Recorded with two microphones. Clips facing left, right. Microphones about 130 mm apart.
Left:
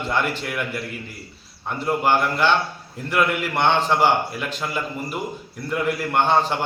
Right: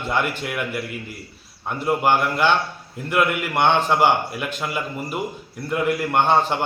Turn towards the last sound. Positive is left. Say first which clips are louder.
# right 1 dB
turn(degrees=-5)  # may be behind; listen again after turning